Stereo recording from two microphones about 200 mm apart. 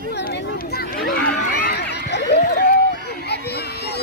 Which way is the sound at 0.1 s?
55° left (ahead or behind).